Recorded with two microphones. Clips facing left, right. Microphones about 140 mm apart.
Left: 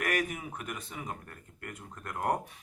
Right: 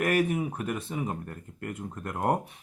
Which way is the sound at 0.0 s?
30° right (ahead or behind).